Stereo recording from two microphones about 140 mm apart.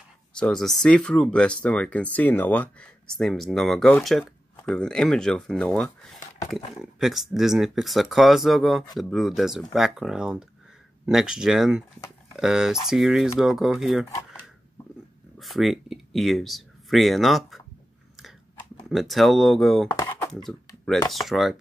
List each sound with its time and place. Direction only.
0.3 s speech: 5° left (ahead or behind)
15.3 s speech: centre (ahead or behind)
18.9 s speech: centre (ahead or behind)
19.9 s a sound: 25° left (ahead or behind)
20.4 s speech: 5° left (ahead or behind)